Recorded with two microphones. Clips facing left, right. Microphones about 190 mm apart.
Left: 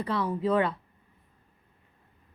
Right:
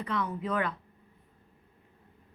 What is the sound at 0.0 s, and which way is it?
Speech, 30° left (ahead or behind).